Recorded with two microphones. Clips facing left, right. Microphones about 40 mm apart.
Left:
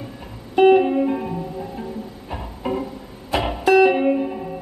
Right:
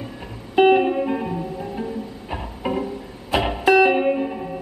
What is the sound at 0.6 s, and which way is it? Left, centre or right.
Music, centre.